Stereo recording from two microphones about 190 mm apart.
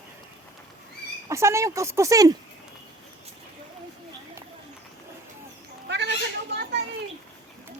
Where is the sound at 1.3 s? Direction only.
15° right (ahead or behind).